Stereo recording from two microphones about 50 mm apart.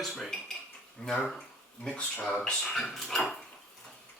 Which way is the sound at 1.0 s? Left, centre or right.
Left.